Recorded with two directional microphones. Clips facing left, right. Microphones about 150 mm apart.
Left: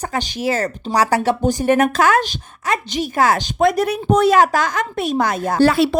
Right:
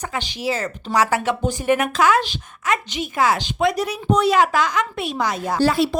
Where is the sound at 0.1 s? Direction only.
45° left (ahead or behind).